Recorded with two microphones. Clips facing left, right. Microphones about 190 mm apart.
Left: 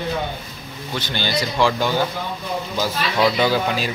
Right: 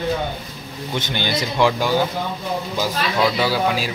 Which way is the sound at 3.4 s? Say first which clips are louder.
Even; 5° right (ahead or behind).